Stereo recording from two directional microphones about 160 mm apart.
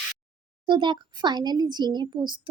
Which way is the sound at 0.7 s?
30° right (ahead or behind).